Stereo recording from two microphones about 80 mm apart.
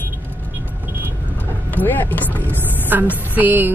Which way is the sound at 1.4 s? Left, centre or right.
Left.